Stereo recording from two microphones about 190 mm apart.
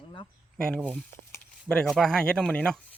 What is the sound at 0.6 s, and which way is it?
Speech, 5° left (ahead or behind).